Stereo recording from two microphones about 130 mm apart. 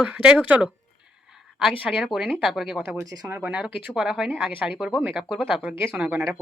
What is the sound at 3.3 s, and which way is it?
Speech, 10° right (ahead or behind).